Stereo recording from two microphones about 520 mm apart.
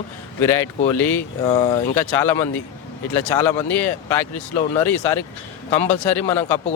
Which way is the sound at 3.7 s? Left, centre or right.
Left.